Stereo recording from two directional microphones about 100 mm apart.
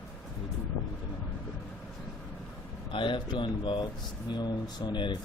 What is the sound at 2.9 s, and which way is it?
Speech, 55° left (ahead or behind).